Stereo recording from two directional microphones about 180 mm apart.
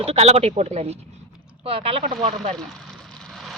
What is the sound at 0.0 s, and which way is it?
Speech, 35° right (ahead or behind).